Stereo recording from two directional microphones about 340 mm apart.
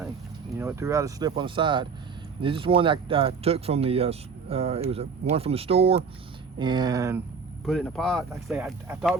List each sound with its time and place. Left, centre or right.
0.5 s speech: centre
7.6 s speech: centre